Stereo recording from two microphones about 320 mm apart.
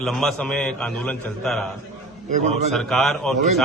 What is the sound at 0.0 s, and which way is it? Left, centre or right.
A man's voice, centre.